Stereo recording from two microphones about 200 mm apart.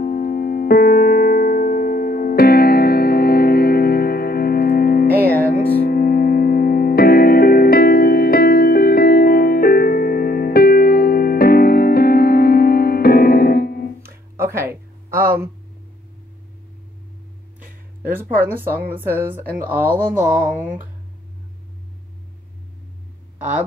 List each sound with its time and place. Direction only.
0.0 s music: 45° left (ahead or behind)
14.0 s music: 15° right (ahead or behind)
18.1 s speech: 10° right (ahead or behind)